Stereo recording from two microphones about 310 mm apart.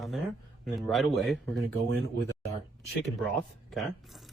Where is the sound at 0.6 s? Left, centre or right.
Centre.